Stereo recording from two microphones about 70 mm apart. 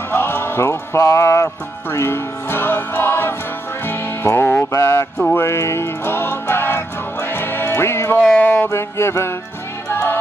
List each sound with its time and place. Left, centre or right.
0.1 s music: left
2.0 s music: left
4.7 s a sound: left
5.3 s music: left
8.2 s a sound: centre
8.6 s music: left